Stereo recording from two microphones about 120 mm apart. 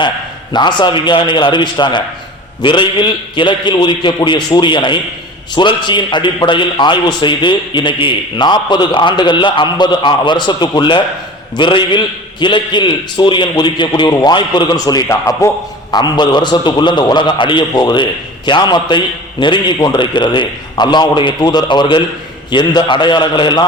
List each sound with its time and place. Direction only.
0.5 s a man's voice: 40° left (ahead or behind)
15.9 s a man's voice: 35° left (ahead or behind)